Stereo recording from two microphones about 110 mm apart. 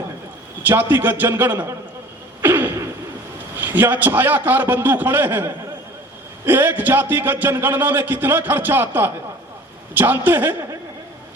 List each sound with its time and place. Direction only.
0.7 s a man's voice: 20° right (ahead or behind)
2.4 s a sound: 20° right (ahead or behind)
3.6 s a man's voice: 20° right (ahead or behind)